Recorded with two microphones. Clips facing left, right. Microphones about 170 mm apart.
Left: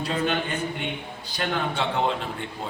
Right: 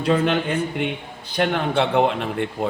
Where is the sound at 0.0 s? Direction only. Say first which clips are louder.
Right 7 dB; 55° right (ahead or behind).